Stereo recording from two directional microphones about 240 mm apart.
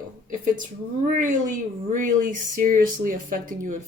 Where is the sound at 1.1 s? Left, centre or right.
Right.